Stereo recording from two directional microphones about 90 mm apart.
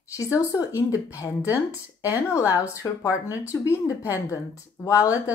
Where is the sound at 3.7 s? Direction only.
30° left (ahead or behind).